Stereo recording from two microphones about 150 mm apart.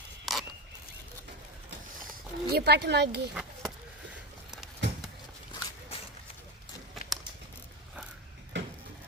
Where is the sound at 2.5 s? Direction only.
90° right.